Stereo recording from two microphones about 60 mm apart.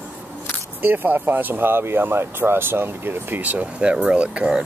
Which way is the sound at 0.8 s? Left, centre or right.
Right.